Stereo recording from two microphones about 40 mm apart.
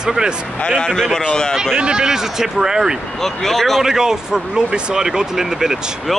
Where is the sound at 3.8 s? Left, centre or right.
Centre.